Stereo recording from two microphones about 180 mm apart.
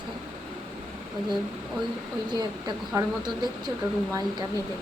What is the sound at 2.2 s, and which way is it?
A woman's voice, 25° right (ahead or behind).